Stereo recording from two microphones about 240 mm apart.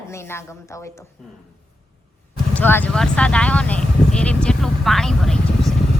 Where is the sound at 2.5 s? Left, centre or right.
Centre.